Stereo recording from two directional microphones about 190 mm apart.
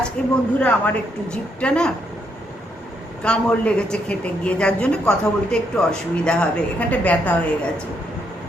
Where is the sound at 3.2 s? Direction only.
5° left (ahead or behind).